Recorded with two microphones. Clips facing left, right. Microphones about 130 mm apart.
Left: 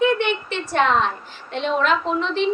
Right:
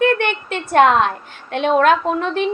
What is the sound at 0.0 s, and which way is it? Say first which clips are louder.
A woman's voice: right 2 dB; 55° right (ahead or behind).